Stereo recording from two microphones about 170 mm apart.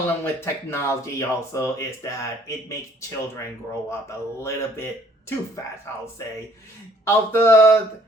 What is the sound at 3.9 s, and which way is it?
Speech, 15° left (ahead or behind).